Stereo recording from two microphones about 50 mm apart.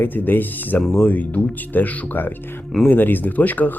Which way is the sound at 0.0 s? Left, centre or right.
Left.